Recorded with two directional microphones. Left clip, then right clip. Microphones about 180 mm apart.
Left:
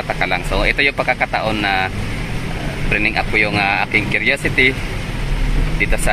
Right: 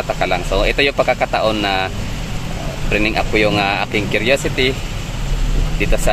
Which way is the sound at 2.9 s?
15° right (ahead or behind).